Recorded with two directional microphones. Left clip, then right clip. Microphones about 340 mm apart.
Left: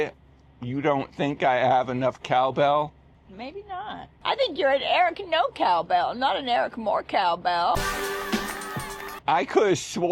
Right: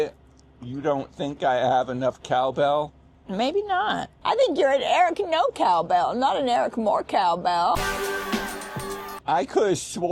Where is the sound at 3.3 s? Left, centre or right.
Right.